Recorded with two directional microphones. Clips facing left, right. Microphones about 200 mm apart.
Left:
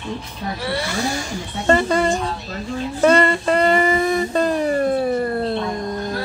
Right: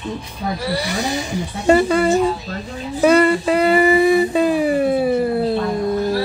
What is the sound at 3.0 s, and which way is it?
Humming, 5° right (ahead or behind).